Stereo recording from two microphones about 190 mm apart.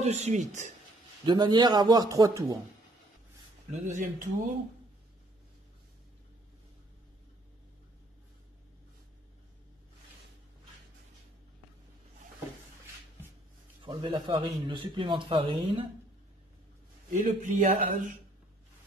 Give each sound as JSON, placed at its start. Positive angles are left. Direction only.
{"t": 0.0, "sound": "speech", "side_deg": -35}
{"t": 1.2, "sound": "a man's voice", "side_deg": -25}
{"t": 3.7, "sound": "speech", "side_deg": -40}
{"t": 13.8, "sound": "a man's voice", "side_deg": -25}
{"t": 17.1, "sound": "speech", "side_deg": -40}